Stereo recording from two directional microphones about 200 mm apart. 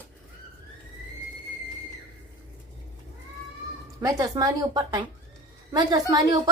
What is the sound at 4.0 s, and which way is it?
A woman's voice, 15° right (ahead or behind).